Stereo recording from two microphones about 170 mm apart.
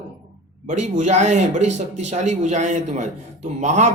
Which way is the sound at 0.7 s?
45° right (ahead or behind).